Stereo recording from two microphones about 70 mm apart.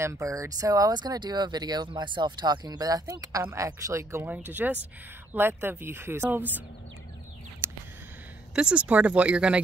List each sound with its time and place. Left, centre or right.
0.0 s speech: right
3.5 s speech: right
4.3 s speech: right
8.5 s speech: centre